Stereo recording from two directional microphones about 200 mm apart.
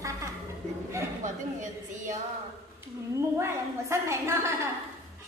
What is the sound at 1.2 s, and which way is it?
Speech, 40° right (ahead or behind).